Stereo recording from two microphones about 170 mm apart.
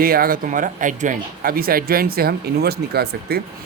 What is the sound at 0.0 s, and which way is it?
Speech, 60° right (ahead or behind).